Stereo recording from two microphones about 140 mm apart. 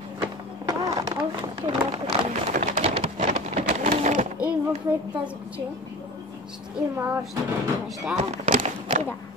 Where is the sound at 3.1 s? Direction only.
60° right (ahead or behind).